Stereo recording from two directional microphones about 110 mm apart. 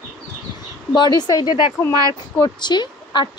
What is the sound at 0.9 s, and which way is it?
A woman's voice, 40° left (ahead or behind).